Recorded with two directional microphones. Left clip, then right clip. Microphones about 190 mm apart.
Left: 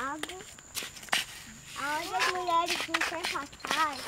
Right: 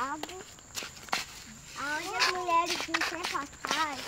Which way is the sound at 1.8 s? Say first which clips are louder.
Even; 5° left (ahead or behind).